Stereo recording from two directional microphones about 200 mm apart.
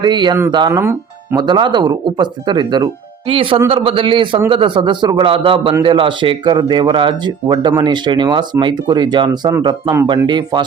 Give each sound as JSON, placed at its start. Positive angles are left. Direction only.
{"t": 0.0, "sound": "speech", "side_deg": -20}